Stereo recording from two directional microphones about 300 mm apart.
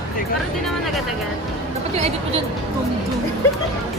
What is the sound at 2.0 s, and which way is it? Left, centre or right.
Speech, centre.